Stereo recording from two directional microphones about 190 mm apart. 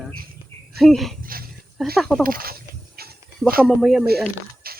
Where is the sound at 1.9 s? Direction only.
Centre (ahead or behind).